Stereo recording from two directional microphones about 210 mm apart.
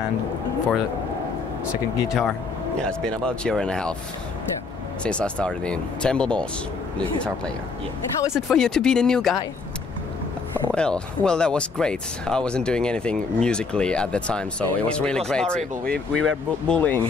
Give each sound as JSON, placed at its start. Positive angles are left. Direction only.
{"t": 2.0, "sound": "speech", "side_deg": 0}
{"t": 5.0, "sound": "speech", "side_deg": 5}
{"t": 8.3, "sound": "speech", "side_deg": 0}
{"t": 10.7, "sound": "speech", "side_deg": 5}